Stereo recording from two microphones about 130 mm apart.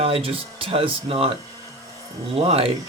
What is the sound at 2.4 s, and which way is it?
Speech, 50° right (ahead or behind).